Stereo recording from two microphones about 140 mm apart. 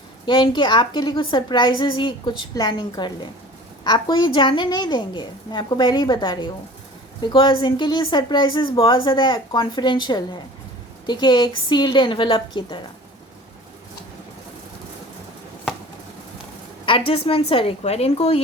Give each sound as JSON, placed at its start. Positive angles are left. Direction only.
{"t": 0.3, "sound": "a woman's voice", "side_deg": 35}
{"t": 16.8, "sound": "speech", "side_deg": 40}